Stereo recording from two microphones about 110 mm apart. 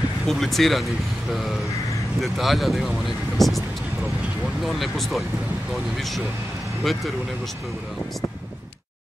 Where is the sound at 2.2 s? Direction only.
Centre (ahead or behind).